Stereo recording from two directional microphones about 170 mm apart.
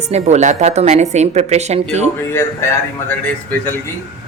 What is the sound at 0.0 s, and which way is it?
Speech, 40° right (ahead or behind).